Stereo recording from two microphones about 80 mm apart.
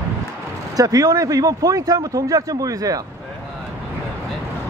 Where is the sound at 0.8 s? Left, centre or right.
Right.